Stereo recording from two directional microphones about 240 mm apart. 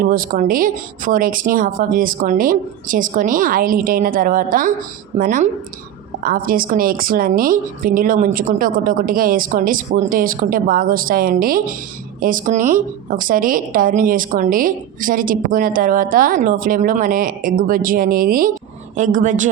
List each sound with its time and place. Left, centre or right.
0.0 s a woman's voice: right